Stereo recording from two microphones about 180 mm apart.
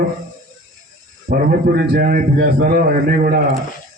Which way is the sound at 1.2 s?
50° right (ahead or behind).